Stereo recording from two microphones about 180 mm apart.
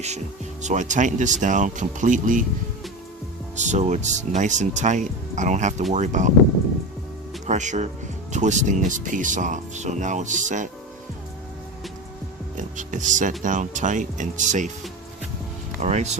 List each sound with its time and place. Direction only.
0.6 s speech: 40° right (ahead or behind)
3.5 s speech: 40° right (ahead or behind)
7.4 s speech: 40° right (ahead or behind)
12.5 s speech: 45° right (ahead or behind)
15.8 s speech: 40° right (ahead or behind)